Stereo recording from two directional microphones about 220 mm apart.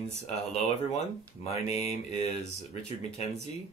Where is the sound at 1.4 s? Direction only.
30° left (ahead or behind).